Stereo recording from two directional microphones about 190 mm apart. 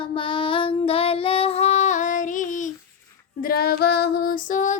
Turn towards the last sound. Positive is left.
turn(degrees=45)  # may be behind; listen again after turning